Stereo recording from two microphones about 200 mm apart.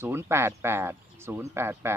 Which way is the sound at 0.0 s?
10° right (ahead or behind).